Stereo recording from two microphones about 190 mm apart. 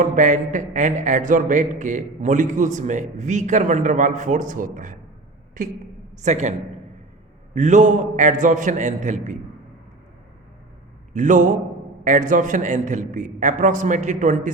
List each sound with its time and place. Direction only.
0.0 s a man's voice: 40° right (ahead or behind)
7.5 s a man's voice: 40° right (ahead or behind)
11.1 s a man's voice: 40° right (ahead or behind)